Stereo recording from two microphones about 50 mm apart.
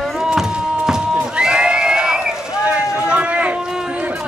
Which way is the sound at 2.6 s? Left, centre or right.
Right.